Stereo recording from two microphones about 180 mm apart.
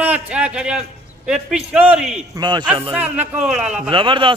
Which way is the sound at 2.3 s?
25° right (ahead or behind).